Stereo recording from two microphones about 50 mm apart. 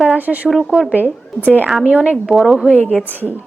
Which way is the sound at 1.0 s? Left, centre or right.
Left.